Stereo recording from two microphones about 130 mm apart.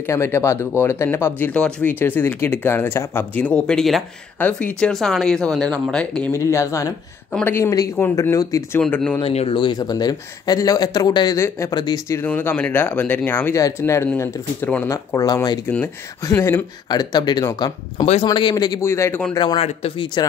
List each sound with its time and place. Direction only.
0.0 s speech: 20° left (ahead or behind)
6.3 s speech: 25° left (ahead or behind)
8.9 s speech: 15° left (ahead or behind)
9.2 s speech: 50° left (ahead or behind)
9.6 s speech: 30° left (ahead or behind)
12.2 s speech: 15° left (ahead or behind)
13.6 s speech: 25° left (ahead or behind)
15.1 s speech: 30° left (ahead or behind)
15.6 s speech: 15° left (ahead or behind)
19.3 s speech: 40° left (ahead or behind)
19.6 s speech: 50° left (ahead or behind)